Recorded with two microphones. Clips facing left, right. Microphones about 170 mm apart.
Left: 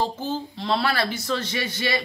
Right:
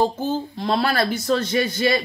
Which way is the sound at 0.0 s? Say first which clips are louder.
Right 5 dB; 50° right (ahead or behind).